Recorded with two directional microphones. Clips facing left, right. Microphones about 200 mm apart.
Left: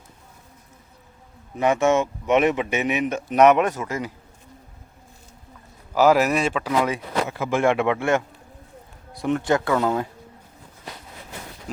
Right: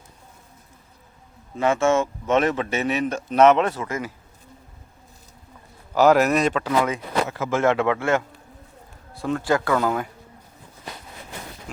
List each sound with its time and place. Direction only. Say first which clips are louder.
1.5 s speech: left 1 dB; 20° left (ahead or behind)
5.9 s a man's voice: right 1 dB; 5° left (ahead or behind); by 10.1 s 25° left (ahead or behind)